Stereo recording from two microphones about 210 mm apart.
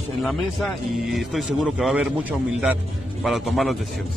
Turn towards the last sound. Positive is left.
turn(degrees=0)  # may be behind; listen again after turning